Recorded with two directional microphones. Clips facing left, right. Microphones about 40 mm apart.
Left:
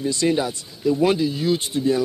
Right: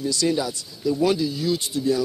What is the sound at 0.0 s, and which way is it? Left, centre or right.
Speech, left.